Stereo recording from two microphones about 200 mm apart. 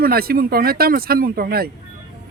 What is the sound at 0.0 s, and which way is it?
Speech, 50° right (ahead or behind).